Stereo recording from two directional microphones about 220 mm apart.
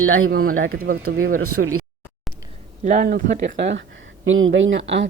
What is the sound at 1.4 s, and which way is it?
Speech, 85° right.